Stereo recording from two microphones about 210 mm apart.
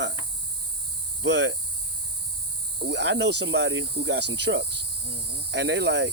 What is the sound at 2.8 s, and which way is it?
Cricket, 55° right (ahead or behind).